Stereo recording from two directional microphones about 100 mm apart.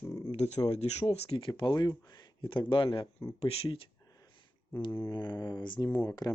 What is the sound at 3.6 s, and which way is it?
Speech, 65° left (ahead or behind).